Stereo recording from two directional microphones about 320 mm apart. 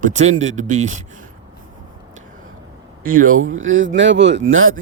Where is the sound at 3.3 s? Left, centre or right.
Right.